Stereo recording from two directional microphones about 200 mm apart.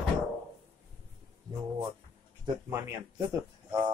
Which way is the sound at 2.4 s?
10° right (ahead or behind).